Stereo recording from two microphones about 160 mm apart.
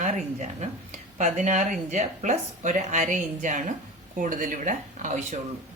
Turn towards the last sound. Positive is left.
turn(degrees=-50)  # may be behind; listen again after turning